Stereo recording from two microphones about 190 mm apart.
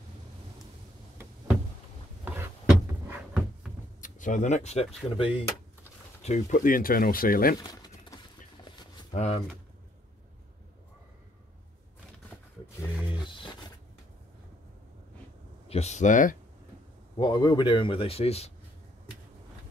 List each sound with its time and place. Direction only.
2.2 s a sound: 10° right (ahead or behind)
4.0 s speech: 40° left (ahead or behind)
7.7 s pigeon: 20° left (ahead or behind)
9.1 s speech: 35° left (ahead or behind)
13.2 s a sound: 25° left (ahead or behind)
15.7 s speech: 35° left (ahead or behind)
17.2 s speech: 25° left (ahead or behind)